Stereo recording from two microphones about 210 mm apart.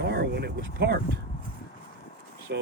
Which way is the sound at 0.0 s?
50° right (ahead or behind).